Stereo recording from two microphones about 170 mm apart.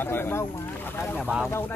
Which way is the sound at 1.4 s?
10° left (ahead or behind).